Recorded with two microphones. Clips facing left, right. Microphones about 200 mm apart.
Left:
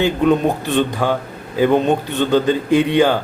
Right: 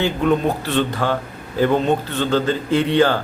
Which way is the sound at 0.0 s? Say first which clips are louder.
Left 3 dB; 15° left (ahead or behind).